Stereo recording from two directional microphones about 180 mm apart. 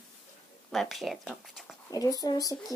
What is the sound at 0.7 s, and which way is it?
Speech, centre (ahead or behind).